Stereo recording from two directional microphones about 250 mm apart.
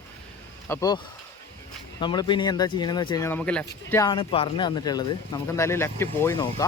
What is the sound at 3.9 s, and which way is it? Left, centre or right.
Speech, centre.